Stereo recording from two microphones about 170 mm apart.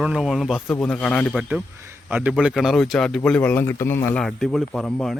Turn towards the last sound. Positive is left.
turn(degrees=5)  # may be behind; listen again after turning